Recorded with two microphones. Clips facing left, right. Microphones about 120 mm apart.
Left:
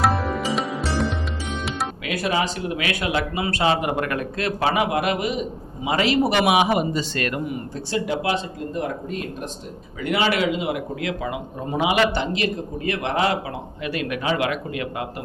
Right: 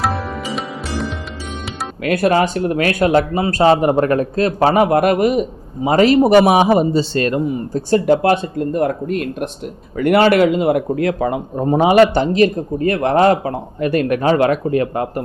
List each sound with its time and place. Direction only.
0.0 s music: centre (ahead or behind)
2.0 s speech: 55° right (ahead or behind); by 7.6 s 30° right (ahead or behind)
7.7 s speech: 45° right (ahead or behind)